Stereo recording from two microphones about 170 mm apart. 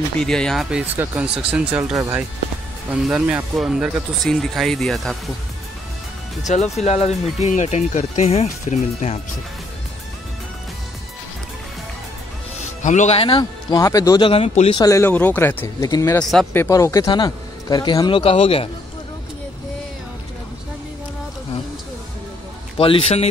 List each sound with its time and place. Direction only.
0.2 s speech: 5° left (ahead or behind)
6.4 s speech: 40° left (ahead or behind)
12.8 s speech: 45° left (ahead or behind)
14.8 s speech: 15° left (ahead or behind); by 18.7 s 35° left (ahead or behind)
22.8 s speech: 30° left (ahead or behind)